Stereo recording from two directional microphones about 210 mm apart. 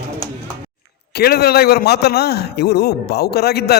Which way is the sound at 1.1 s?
50° left (ahead or behind).